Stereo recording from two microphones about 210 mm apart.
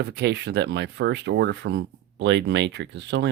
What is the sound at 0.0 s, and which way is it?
Speech, 50° right (ahead or behind).